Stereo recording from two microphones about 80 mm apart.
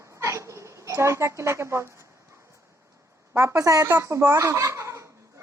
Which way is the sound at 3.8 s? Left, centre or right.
Right.